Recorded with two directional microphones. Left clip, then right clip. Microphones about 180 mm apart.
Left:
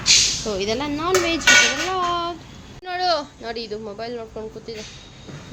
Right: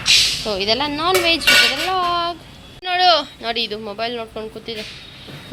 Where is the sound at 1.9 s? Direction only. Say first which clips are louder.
Right 4 dB; 10° left (ahead or behind).